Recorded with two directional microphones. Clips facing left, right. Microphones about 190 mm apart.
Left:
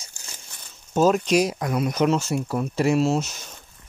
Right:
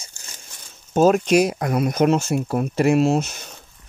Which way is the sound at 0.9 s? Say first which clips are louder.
Right 3 dB; 60° right (ahead or behind).